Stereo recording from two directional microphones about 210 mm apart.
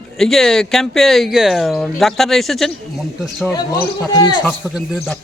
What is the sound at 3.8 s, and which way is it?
Speech, 20° left (ahead or behind).